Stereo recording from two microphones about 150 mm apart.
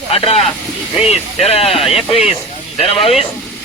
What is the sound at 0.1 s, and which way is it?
Speech, 40° left (ahead or behind).